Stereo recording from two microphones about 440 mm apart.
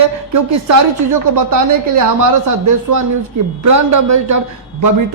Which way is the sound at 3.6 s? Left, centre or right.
Right.